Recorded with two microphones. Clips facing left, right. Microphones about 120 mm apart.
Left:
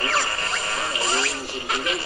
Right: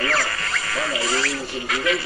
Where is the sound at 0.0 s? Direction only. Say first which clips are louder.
Right 1 dB; 25° left (ahead or behind).